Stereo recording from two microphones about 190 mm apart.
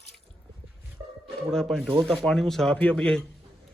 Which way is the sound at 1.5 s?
5° left (ahead or behind).